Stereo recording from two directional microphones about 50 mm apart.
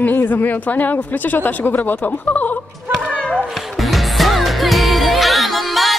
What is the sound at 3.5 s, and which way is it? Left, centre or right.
Music, centre.